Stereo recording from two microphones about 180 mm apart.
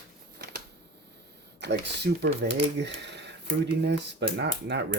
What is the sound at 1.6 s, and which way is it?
Speech, 70° right (ahead or behind).